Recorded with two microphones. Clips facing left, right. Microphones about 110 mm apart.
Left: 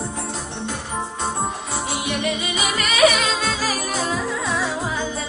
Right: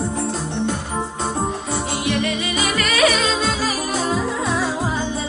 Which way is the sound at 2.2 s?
20° left (ahead or behind).